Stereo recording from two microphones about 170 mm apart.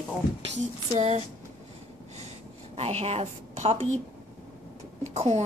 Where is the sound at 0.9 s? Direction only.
40° right (ahead or behind).